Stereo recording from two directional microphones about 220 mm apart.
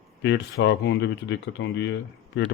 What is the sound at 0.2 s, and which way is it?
Speech, 55° left (ahead or behind).